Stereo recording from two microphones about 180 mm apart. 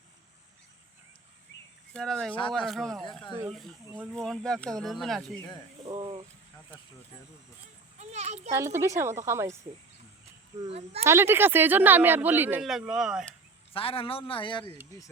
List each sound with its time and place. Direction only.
1.5 s cricket: 90° left
1.9 s speech: 5° left (ahead or behind)
5.9 s a sound: 25° right (ahead or behind)
7.9 s a child's voice: 40° right (ahead or behind)
8.5 s speech: 15° right (ahead or behind)
10.7 s speech: 35° right (ahead or behind)
11.0 s speech: 15° right (ahead or behind)
13.7 s a man's voice: 30° left (ahead or behind)